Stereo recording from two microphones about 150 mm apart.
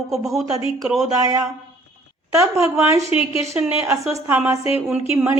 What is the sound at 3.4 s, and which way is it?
Speech, 15° right (ahead or behind).